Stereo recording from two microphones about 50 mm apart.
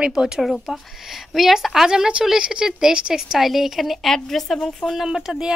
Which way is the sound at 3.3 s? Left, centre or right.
Centre.